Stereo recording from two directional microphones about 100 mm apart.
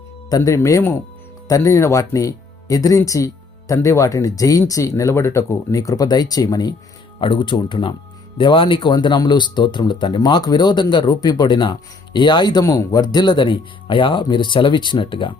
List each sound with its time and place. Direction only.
0.3 s speech: 35° left (ahead or behind)
7.2 s speech: 55° left (ahead or behind)
12.6 s speech: 35° left (ahead or behind); by 15.4 s 55° left (ahead or behind)